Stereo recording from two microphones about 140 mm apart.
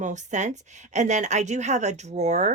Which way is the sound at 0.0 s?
60° right (ahead or behind).